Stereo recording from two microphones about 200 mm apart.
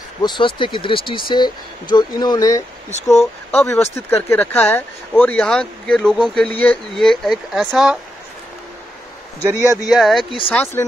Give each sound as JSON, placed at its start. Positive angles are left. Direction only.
{"t": 0.2, "sound": "speech", "side_deg": 25}
{"t": 9.4, "sound": "speech", "side_deg": -10}
{"t": 9.8, "sound": "speech", "side_deg": 0}
{"t": 10.5, "sound": "speech", "side_deg": 10}